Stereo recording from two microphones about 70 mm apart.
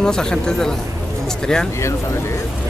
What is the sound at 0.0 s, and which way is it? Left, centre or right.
Speech, centre.